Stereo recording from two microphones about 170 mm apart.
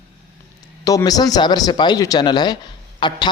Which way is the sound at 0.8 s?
20° left (ahead or behind).